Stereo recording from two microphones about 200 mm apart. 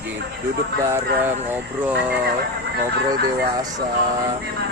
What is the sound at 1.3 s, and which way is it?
Speech, 10° right (ahead or behind).